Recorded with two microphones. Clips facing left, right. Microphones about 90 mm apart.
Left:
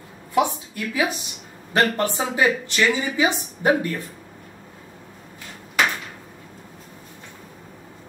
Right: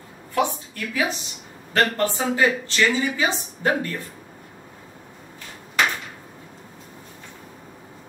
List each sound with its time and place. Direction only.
0.3 s a woman's voice: 15° left (ahead or behind)